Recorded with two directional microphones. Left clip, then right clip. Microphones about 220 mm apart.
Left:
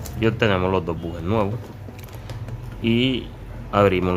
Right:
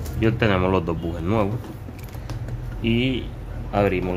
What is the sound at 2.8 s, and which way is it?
Speech, 20° left (ahead or behind).